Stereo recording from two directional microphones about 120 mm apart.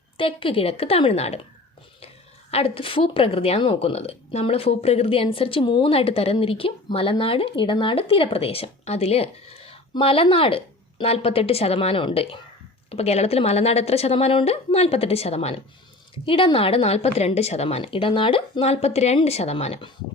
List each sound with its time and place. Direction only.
0.2 s speech: 50° left (ahead or behind)
2.5 s a woman's voice: 55° left (ahead or behind)
16.2 s a woman's voice: 50° left (ahead or behind)